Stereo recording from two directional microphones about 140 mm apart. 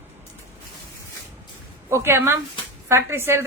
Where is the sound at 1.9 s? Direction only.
20° right (ahead or behind).